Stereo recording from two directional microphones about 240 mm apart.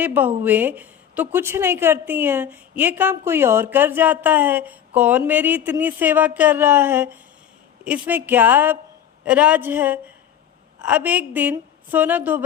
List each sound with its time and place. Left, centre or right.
0.0 s a woman's voice: centre